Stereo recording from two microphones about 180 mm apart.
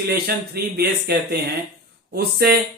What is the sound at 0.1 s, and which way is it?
Speech, 60° right (ahead or behind).